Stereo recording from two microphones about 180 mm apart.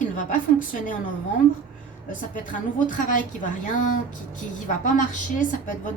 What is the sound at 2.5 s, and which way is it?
A woman's voice, 45° left (ahead or behind).